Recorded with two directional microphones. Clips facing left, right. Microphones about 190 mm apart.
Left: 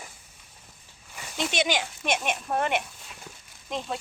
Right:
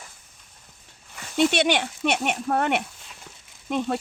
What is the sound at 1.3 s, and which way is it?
Speech, 65° right (ahead or behind).